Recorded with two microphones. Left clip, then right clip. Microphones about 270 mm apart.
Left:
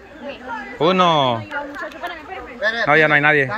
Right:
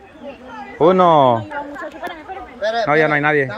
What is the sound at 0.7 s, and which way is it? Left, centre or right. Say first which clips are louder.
Speech: right 4 dB; centre.